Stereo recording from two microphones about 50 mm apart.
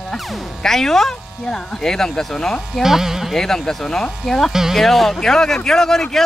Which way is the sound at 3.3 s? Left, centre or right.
Centre.